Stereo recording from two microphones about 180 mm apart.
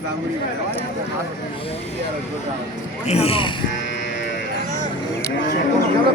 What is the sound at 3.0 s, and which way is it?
Speech, 35° left (ahead or behind).